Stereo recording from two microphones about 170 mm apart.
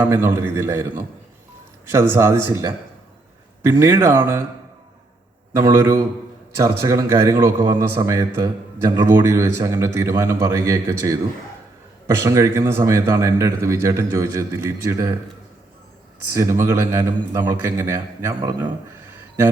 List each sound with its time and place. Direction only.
0.0 s a man's voice: 15° right (ahead or behind)
5.5 s a man's voice: 15° right (ahead or behind)
16.3 s a man's voice: 15° right (ahead or behind)